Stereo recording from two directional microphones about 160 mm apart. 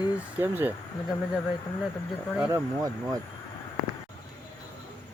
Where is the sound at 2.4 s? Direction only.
15° right (ahead or behind).